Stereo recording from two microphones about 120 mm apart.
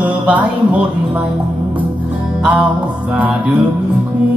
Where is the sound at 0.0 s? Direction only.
10° right (ahead or behind).